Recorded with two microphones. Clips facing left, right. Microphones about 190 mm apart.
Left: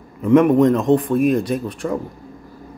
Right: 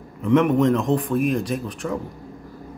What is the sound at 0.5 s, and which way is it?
Speech, 35° left (ahead or behind).